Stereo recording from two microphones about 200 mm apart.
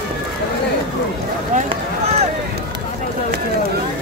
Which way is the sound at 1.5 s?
30° right (ahead or behind).